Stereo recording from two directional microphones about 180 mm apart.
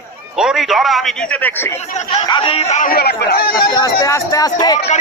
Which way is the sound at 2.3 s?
30° left (ahead or behind).